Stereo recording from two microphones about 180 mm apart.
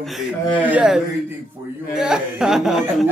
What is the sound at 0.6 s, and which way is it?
Speech, 5° right (ahead or behind).